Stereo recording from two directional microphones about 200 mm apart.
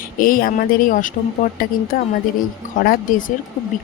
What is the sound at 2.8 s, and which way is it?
Speech, 45° left (ahead or behind).